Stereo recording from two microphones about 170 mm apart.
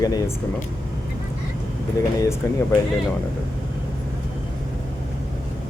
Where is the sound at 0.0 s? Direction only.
20° left (ahead or behind).